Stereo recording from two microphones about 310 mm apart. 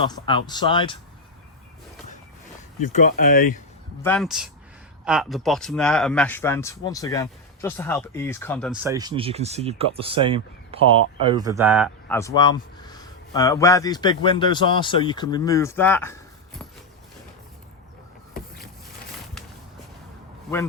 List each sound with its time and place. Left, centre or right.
0.0 s a man's voice: centre
2.8 s speech: left
4.0 s speech: centre
12.4 s a man's voice: centre